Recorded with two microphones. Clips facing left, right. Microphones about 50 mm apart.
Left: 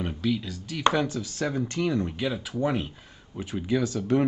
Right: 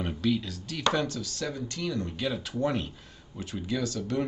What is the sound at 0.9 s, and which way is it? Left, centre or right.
Speech, centre.